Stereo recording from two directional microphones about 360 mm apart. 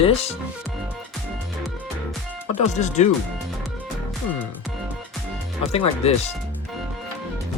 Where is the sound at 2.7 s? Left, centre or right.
Centre.